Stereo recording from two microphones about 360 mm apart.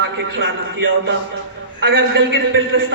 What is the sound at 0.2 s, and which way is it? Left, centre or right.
A man's voice, right.